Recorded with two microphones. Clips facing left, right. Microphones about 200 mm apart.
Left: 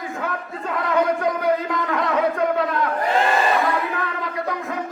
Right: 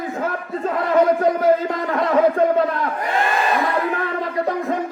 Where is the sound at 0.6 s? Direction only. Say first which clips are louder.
Right 4 dB; 35° right (ahead or behind).